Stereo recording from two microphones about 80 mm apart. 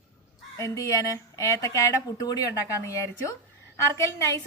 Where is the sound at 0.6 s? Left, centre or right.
Left.